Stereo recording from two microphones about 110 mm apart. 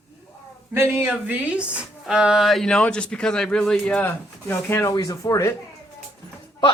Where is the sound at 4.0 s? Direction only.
20° left (ahead or behind).